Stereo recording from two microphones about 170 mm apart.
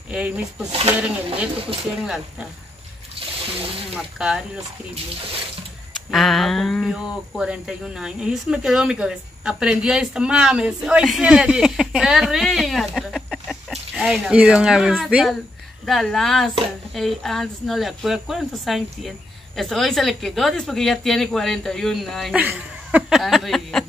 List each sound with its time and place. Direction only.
0.1 s speech: 5° right (ahead or behind)
2.0 s speech: 5° right (ahead or behind)
3.2 s a sound: 35° right (ahead or behind)
3.9 s speech: 5° right (ahead or behind)
6.0 s speech: centre (ahead or behind)